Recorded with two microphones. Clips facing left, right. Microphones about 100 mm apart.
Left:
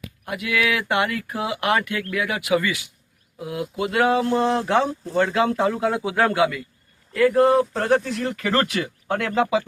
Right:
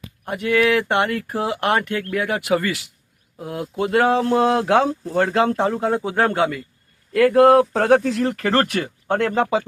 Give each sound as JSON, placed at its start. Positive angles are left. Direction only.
{"t": 0.3, "sound": "speech", "side_deg": -35}
{"t": 4.4, "sound": "speech", "side_deg": -60}
{"t": 7.1, "sound": "speech", "side_deg": -65}
{"t": 9.1, "sound": "speech", "side_deg": -40}